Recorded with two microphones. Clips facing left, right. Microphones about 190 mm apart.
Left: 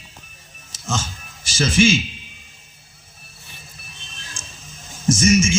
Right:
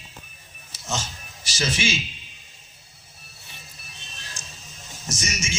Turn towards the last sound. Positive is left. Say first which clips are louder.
# left 16 dB
turn(degrees=50)  # may be behind; listen again after turning